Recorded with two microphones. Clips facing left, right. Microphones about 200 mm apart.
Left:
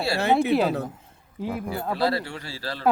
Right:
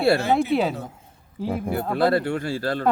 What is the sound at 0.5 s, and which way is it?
Speech, centre (ahead or behind).